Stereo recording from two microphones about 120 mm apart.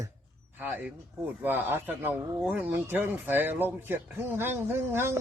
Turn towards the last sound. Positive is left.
turn(degrees=-20)  # may be behind; listen again after turning